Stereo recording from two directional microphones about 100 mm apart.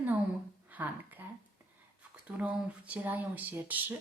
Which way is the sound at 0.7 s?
15° right (ahead or behind).